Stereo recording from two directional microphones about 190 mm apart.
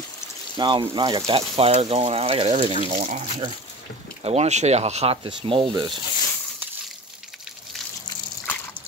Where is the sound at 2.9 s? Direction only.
40° right (ahead or behind); by 6.0 s 25° right (ahead or behind).